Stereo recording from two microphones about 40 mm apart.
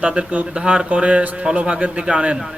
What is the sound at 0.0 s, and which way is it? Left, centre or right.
Speech, right.